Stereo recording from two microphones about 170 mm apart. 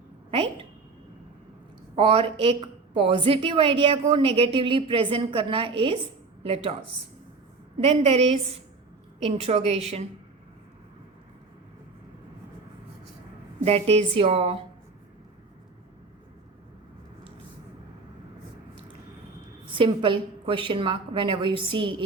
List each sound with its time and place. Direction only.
2.0 s a woman's voice: 35° right (ahead or behind)
7.8 s a woman's voice: 40° right (ahead or behind)
13.7 s a woman's voice: 35° right (ahead or behind)
19.7 s a woman's voice: 30° right (ahead or behind)